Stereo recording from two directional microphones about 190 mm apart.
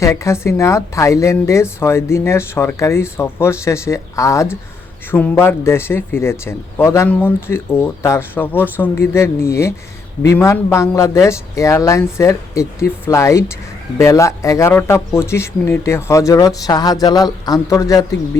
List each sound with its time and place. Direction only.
0.0 s a woman's voice: 15° left (ahead or behind)